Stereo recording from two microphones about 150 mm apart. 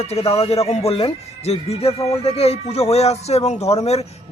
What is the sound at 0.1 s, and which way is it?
Speech, 45° left (ahead or behind).